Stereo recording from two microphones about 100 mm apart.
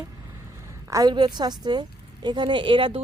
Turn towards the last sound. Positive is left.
turn(degrees=-60)  # may be behind; listen again after turning